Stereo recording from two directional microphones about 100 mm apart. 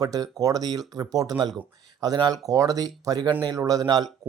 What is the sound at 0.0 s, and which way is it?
Speech, 40° right (ahead or behind).